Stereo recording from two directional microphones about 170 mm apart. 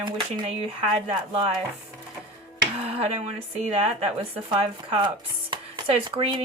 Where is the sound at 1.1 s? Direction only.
30° right (ahead or behind).